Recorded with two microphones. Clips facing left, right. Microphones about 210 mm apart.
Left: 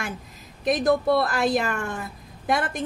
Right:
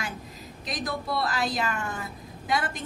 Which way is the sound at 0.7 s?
55° left (ahead or behind).